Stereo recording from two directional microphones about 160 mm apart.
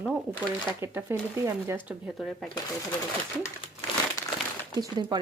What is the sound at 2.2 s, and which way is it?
Speech, centre (ahead or behind).